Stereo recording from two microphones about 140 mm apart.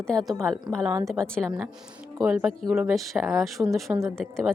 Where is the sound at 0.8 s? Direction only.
20° right (ahead or behind).